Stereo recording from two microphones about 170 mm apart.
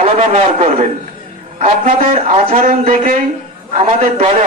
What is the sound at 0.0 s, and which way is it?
A man's voice, 40° right (ahead or behind).